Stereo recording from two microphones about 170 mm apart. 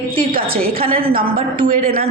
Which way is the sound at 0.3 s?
60° right (ahead or behind).